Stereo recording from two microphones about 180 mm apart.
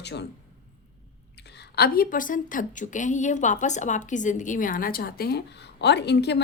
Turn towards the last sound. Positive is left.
turn(degrees=70)  # may be behind; listen again after turning